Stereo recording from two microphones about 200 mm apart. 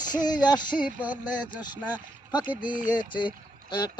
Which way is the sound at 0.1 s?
20° left (ahead or behind).